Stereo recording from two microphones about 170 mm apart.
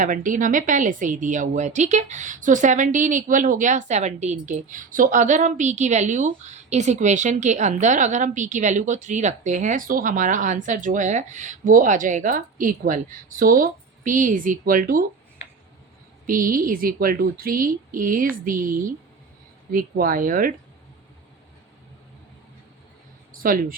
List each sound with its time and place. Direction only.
0.0 s a woman's voice: 50° right (ahead or behind)
16.2 s a woman's voice: 55° right (ahead or behind)
23.4 s speech: 55° right (ahead or behind)